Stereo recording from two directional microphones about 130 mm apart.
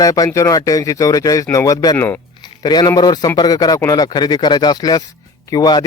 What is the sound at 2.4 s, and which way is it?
Speech, 30° left (ahead or behind).